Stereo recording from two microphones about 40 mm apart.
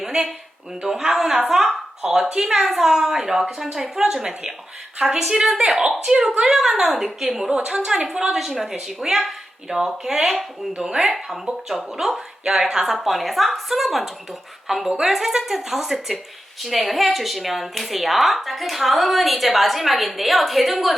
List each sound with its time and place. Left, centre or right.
0.0 s a sound: centre
0.9 s speech: centre
12.9 s speech: centre